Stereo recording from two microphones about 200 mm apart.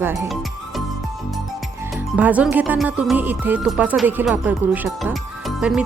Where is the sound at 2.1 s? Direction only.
5° right (ahead or behind).